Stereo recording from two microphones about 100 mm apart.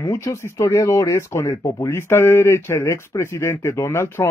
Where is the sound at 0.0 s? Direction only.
25° left (ahead or behind).